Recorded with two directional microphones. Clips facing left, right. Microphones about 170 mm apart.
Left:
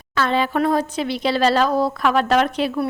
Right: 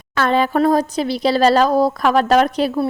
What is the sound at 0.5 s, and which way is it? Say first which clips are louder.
A woman's voice: right 4 dB; 40° right (ahead or behind).